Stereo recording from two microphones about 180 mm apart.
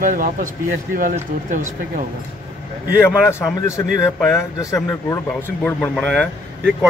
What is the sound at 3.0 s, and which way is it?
Speech, 15° left (ahead or behind).